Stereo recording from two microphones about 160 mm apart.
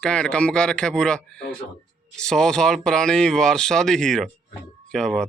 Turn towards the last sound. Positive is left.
turn(degrees=5)  # may be behind; listen again after turning